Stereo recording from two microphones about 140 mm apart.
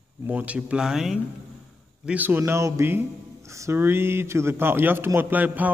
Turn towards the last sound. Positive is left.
turn(degrees=-10)  # may be behind; listen again after turning